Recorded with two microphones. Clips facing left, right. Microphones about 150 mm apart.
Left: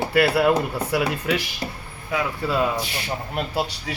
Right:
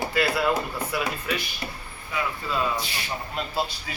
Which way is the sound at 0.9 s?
80° left.